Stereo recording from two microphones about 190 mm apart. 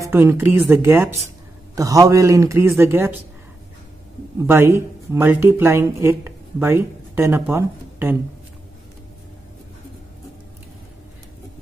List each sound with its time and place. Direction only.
0.1 s a man's voice: 10° right (ahead or behind)
4.4 s speech: 15° right (ahead or behind)